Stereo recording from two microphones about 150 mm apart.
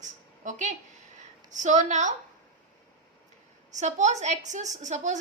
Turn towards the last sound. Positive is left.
turn(degrees=-55)  # may be behind; listen again after turning